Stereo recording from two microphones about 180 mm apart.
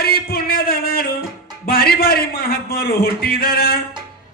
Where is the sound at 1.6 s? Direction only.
55° left (ahead or behind).